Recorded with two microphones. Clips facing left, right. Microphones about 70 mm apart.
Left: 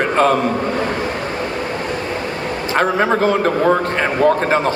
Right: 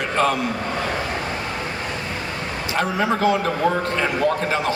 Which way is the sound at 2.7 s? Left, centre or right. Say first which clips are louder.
Left 6 dB; left.